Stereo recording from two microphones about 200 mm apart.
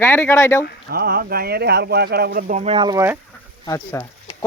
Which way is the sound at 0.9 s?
50° right (ahead or behind).